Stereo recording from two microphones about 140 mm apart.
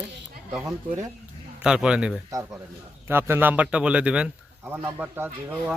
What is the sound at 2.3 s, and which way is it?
A man's voice, 25° right (ahead or behind).